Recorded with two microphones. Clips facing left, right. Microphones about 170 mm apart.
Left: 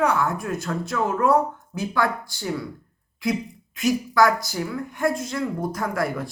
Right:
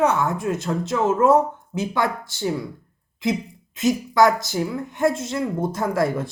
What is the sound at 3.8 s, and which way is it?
A woman's voice, 20° right (ahead or behind).